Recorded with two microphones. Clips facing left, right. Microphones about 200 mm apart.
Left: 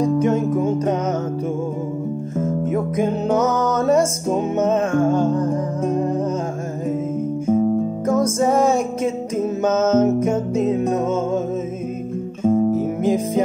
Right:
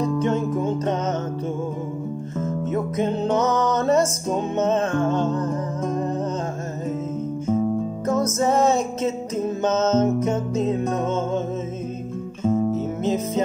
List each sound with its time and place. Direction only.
0.0 s music: 10° left (ahead or behind)
2.6 s music: 10° left (ahead or behind)
8.1 s music: 10° left (ahead or behind)
12.4 s guitar: 30° left (ahead or behind)
12.7 s music: 10° left (ahead or behind)